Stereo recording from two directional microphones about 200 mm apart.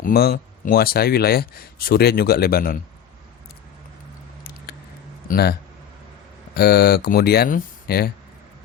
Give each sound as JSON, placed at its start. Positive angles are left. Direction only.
{"t": 0.0, "sound": "speech", "side_deg": 50}
{"t": 5.3, "sound": "speech", "side_deg": 50}